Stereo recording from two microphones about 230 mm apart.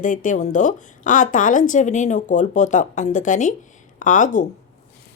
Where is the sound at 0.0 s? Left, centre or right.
Left.